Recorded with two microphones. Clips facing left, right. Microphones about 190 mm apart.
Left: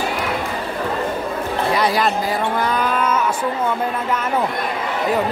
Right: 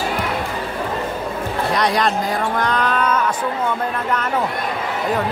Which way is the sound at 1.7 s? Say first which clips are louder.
Even; 5° left (ahead or behind).